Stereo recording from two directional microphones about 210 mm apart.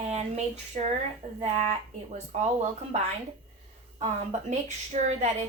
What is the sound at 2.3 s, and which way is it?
Speech, 30° right (ahead or behind).